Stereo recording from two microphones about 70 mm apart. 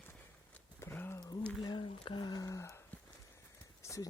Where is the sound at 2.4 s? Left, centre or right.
Left.